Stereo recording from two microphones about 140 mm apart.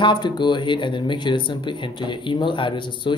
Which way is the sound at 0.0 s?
35° left (ahead or behind).